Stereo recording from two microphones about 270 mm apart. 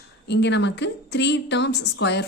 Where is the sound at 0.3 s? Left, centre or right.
Left.